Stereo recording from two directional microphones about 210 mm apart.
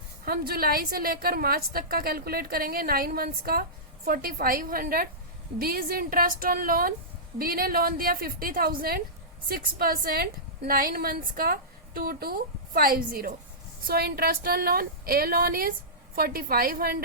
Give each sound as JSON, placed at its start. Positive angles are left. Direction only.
{"t": 0.3, "sound": "a woman's voice", "side_deg": -45}